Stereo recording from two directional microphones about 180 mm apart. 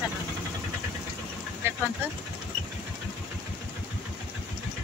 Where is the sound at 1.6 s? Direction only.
15° right (ahead or behind).